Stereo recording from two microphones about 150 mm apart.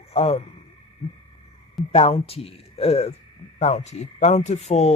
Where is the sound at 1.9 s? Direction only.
40° left (ahead or behind).